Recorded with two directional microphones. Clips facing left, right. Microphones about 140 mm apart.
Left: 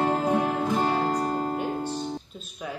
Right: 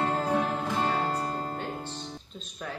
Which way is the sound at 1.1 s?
15° left (ahead or behind).